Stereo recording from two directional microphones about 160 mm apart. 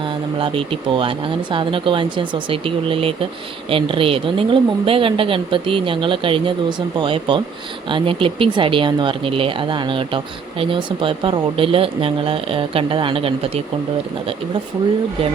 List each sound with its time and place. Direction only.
0.0 s speech: 30° right (ahead or behind)